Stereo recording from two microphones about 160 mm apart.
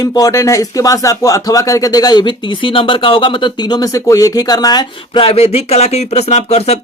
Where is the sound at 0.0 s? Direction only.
25° left (ahead or behind).